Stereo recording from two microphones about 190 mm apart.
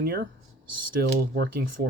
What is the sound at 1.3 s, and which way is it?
Speech, 55° right (ahead or behind).